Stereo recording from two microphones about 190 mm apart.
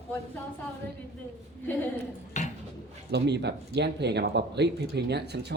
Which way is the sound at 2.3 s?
40° left (ahead or behind).